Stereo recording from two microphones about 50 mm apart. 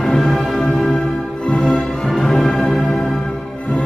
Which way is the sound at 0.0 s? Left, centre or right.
Centre.